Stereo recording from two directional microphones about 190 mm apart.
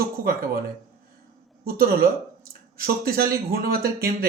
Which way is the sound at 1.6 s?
50° right (ahead or behind).